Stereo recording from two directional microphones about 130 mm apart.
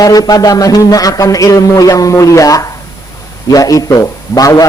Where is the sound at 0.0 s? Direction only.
30° left (ahead or behind).